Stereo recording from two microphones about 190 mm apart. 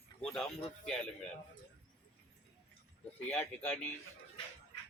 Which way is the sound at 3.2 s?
5° left (ahead or behind).